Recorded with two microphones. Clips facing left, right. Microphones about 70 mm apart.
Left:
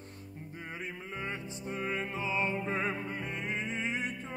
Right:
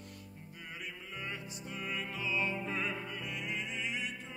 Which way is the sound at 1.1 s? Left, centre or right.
Left.